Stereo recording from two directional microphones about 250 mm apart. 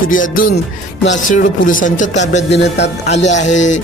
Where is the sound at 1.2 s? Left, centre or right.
Left.